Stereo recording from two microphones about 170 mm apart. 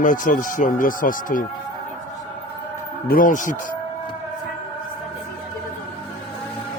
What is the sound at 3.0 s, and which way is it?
Speech, 55° left (ahead or behind).